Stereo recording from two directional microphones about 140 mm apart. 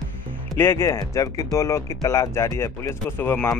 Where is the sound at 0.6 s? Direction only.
20° left (ahead or behind).